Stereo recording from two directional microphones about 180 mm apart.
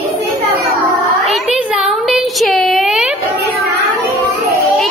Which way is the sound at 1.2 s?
Centre (ahead or behind).